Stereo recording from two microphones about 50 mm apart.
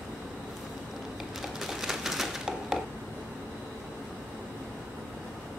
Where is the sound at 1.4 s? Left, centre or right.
Centre.